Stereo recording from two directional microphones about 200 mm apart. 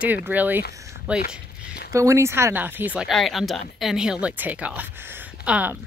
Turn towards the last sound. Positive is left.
turn(degrees=-5)  # may be behind; listen again after turning